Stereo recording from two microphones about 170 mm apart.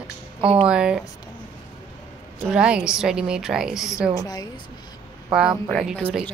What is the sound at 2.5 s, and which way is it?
A woman's voice, 5° right (ahead or behind).